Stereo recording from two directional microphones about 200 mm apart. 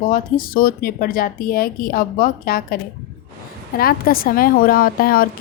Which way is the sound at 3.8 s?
45° left (ahead or behind).